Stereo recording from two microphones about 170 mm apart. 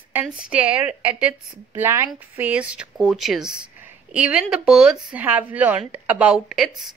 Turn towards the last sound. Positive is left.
turn(degrees=0)  # may be behind; listen again after turning